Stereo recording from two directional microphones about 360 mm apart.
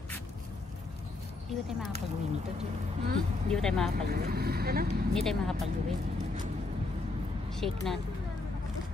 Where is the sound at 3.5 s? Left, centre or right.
Centre.